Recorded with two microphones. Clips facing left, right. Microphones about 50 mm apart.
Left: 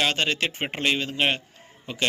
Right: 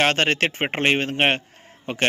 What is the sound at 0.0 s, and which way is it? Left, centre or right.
A man's voice, right.